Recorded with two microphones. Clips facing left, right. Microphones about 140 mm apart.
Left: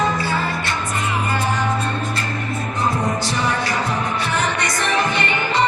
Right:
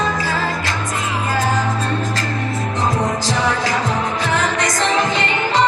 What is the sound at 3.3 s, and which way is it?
Music, 90° right.